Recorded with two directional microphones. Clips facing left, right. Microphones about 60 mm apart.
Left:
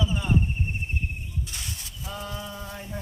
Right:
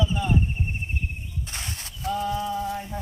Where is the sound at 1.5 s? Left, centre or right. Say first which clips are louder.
Right 3 dB; right.